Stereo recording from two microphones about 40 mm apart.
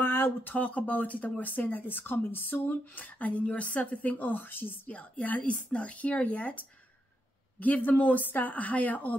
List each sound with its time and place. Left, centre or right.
0.0 s speech: left
4.8 s speech: left
5.5 s speech: left
7.6 s speech: left